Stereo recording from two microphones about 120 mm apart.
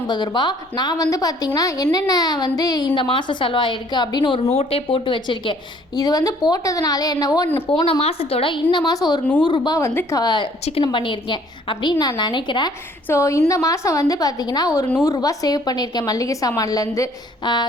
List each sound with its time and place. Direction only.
0.1 s a woman's voice: 35° left (ahead or behind)
4.5 s a woman's voice: 50° left (ahead or behind); by 7.4 s 30° left (ahead or behind)
7.9 s a woman's voice: 55° left (ahead or behind)
8.7 s a woman's voice: 35° left (ahead or behind)
10.2 s a woman's voice: 35° left (ahead or behind)
13.1 s a woman's voice: 25° left (ahead or behind)
17.4 s a woman's voice: 40° left (ahead or behind)